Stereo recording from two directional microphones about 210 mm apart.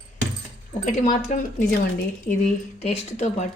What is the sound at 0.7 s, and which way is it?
Speech, 35° left (ahead or behind).